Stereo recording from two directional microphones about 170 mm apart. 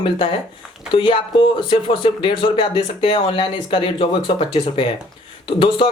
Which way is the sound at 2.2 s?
25° left (ahead or behind).